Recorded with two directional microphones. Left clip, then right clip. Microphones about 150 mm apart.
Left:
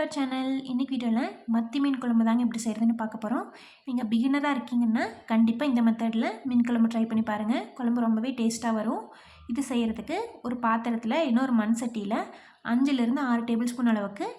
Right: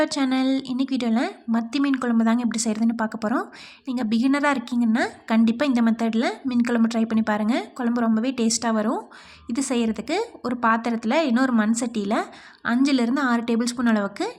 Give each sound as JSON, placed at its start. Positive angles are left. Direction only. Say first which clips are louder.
{"t": 0.0, "sound": "a woman's voice", "louder": "right 7 dB", "side_deg": -40}